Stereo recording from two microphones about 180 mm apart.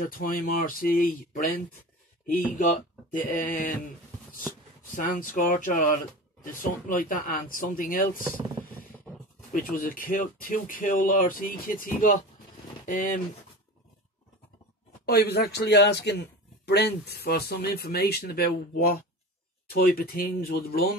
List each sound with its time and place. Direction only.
0.0 s speech: 50° left (ahead or behind)
4.9 s speech: 50° left (ahead or behind)
9.5 s speech: 50° left (ahead or behind)
15.0 s a man's voice: 60° left (ahead or behind)